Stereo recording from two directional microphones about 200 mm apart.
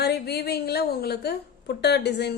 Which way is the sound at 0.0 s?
55° left (ahead or behind).